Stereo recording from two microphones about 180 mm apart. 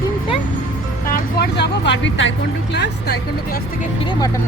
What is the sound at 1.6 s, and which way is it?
Speech, 85° left.